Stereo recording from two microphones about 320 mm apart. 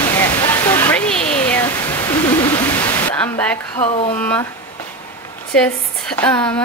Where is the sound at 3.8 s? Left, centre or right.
Centre.